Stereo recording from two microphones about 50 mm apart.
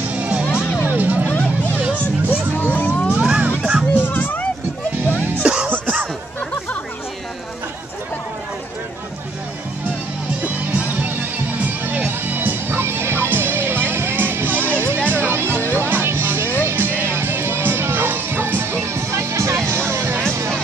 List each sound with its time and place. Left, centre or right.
0.1 s music: right
0.5 s music: left
0.8 s music: right
2.5 s music: left
3.2 s music: right
3.9 s a sound: left
5.4 s music: centre
10.4 s music: right